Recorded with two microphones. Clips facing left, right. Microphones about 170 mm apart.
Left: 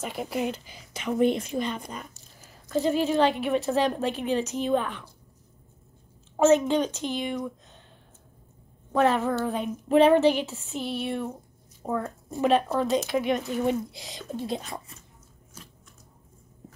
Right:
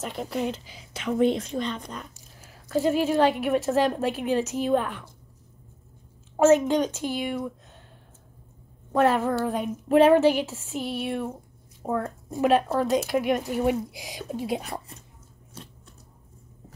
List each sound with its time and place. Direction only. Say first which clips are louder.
0.0 s a woman's voice: even; 5° left (ahead or behind)
2.1 s a sound: right 2 dB; 10° right (ahead or behind)
3.7 s speech: right 2 dB; 5° right (ahead or behind)
6.3 s a woman's voice: right 1 dB; 5° right (ahead or behind)
8.9 s speech: right 1 dB; 10° right (ahead or behind)
14.7 s speech: right 3 dB; 30° right (ahead or behind)
15.6 s a sound: right 5 dB; 30° right (ahead or behind)